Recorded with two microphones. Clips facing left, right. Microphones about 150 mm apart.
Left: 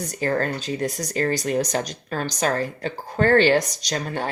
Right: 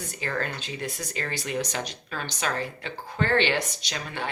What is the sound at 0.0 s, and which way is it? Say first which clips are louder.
Speech: left 8 dB; 40° left (ahead or behind).